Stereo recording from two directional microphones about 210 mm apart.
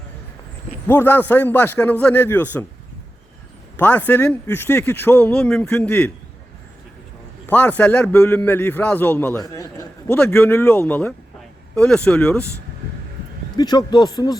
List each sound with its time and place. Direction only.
0.9 s a man's voice: 10° left (ahead or behind)
3.8 s a man's voice: 5° left (ahead or behind)
7.4 s a man's voice: 10° left (ahead or behind)
13.6 s a man's voice: 20° left (ahead or behind)